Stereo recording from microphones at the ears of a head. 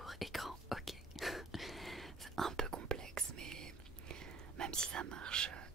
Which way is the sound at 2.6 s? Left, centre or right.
Right.